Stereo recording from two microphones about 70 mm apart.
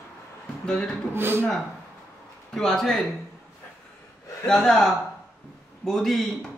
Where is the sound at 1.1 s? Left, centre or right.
Right.